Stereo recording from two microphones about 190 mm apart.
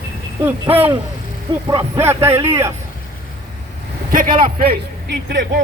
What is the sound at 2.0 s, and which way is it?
Speech, 10° right (ahead or behind).